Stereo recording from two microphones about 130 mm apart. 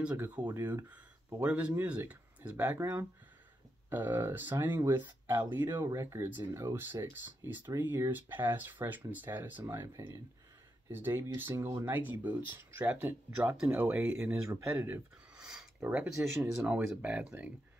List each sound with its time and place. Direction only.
0.0 s speech: 10° right (ahead or behind)
15.3 s a sound: 5° right (ahead or behind)
16.6 s speech: 5° right (ahead or behind)